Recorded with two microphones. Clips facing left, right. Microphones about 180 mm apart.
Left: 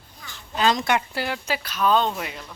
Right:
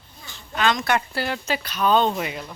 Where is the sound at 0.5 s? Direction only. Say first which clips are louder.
Left 1 dB; 35° left (ahead or behind).